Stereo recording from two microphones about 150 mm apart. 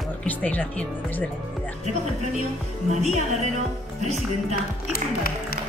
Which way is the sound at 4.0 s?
50° right (ahead or behind).